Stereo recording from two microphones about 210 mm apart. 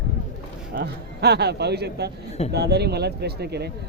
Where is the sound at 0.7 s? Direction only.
50° right (ahead or behind).